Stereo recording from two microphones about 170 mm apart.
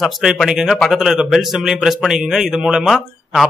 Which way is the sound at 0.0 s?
Centre (ahead or behind).